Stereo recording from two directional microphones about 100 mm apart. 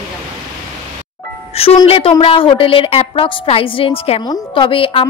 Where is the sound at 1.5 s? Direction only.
80° left.